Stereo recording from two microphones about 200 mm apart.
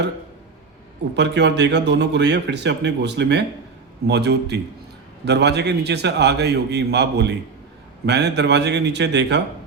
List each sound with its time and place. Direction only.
1.1 s speech: 60° right (ahead or behind)